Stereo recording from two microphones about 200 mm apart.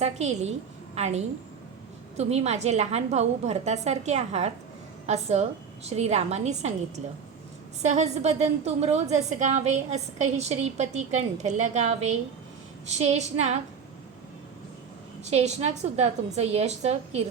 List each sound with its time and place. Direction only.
0.0 s a woman's voice: 35° right (ahead or behind)
15.2 s a woman's voice: 30° right (ahead or behind)